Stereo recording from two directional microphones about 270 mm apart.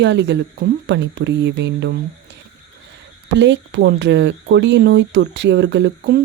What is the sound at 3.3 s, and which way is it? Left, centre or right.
Speech, right.